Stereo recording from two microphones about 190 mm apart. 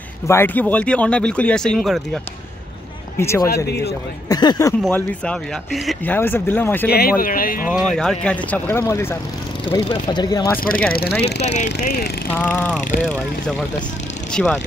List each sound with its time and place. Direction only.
0.3 s speech: 10° left (ahead or behind)
3.2 s speech: 15° left (ahead or behind)
3.6 s speech: 60° left (ahead or behind)
4.3 s speech: 20° left (ahead or behind)
4.8 s speech: 5° left (ahead or behind)
6.9 s speech: 50° left (ahead or behind)
7.6 s speech: centre (ahead or behind)
9.7 s speech: 25° left (ahead or behind)
10.9 s speech: 55° left (ahead or behind)
11.4 s speech: 35° left (ahead or behind)
12.3 s speech: 10° left (ahead or behind)
14.3 s speech: 5° left (ahead or behind)